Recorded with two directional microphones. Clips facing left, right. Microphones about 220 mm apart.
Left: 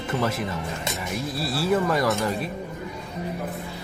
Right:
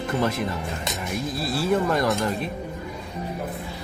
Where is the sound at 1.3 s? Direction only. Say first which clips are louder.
Even; 5° left (ahead or behind).